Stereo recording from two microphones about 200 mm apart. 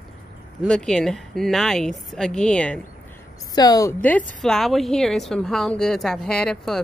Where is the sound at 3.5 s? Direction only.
20° left (ahead or behind).